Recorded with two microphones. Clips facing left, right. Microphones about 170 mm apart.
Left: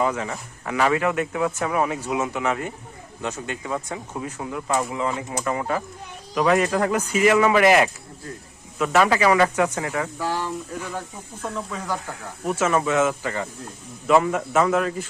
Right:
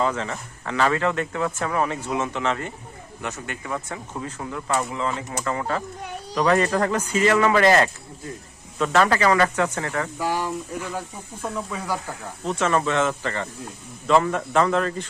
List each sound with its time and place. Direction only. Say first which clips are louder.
0.0 s speech: left 1 dB; 10° left (ahead or behind)
10.2 s speech: right 1 dB; 15° right (ahead or behind)
12.5 s speech: left 1 dB; 10° left (ahead or behind)